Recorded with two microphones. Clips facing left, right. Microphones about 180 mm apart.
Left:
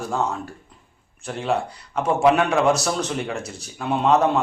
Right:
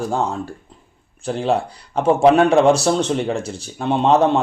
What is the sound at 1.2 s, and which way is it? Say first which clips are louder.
A man's voice: right 5 dB; 30° right (ahead or behind).